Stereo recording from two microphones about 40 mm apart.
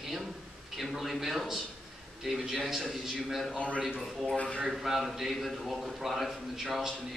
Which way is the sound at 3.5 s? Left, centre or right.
Left.